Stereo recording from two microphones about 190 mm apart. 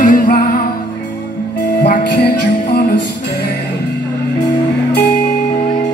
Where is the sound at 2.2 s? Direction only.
60° left (ahead or behind).